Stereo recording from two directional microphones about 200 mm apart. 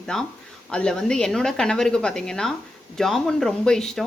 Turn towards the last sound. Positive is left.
turn(degrees=5)  # may be behind; listen again after turning